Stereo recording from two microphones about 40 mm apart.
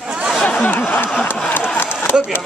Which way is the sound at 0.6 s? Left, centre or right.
Left.